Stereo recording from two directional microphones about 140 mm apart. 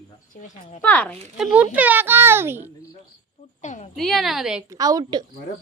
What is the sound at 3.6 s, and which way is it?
Speech, 55° left (ahead or behind).